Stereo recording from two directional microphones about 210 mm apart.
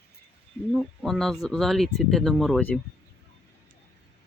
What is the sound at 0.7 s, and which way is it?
Speech, centre (ahead or behind).